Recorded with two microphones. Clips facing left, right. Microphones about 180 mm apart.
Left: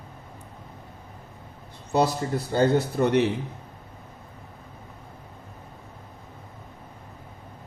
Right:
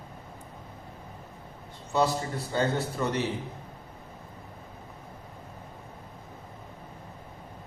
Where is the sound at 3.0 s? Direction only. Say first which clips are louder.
Left 9 dB; 65° left (ahead or behind).